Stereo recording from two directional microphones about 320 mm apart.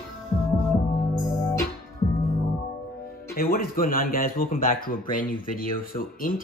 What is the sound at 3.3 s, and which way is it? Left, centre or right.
Speech, left.